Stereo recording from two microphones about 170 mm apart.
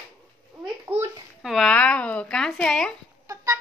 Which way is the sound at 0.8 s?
15° right (ahead or behind).